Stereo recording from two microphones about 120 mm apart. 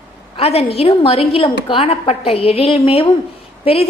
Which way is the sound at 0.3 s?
55° left (ahead or behind).